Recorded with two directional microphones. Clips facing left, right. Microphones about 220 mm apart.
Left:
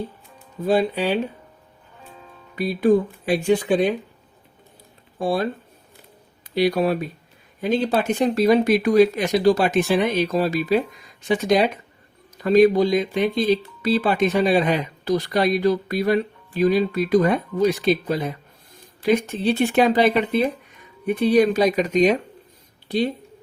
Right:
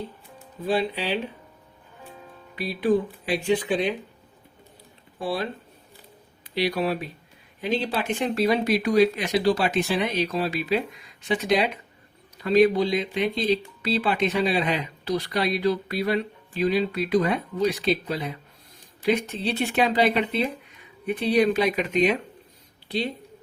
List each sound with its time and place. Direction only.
0.7 s speech: 45° left (ahead or behind)
2.6 s speech: 45° left (ahead or behind)
5.2 s speech: 45° left (ahead or behind)
6.5 s speech: 45° left (ahead or behind)